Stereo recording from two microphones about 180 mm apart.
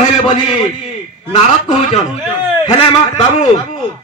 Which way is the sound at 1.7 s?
40° left (ahead or behind).